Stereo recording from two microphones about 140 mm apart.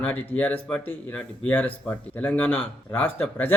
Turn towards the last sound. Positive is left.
turn(degrees=15)  # may be behind; listen again after turning